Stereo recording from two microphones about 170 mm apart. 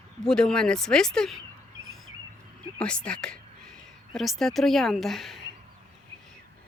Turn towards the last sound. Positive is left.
turn(degrees=0)  # may be behind; listen again after turning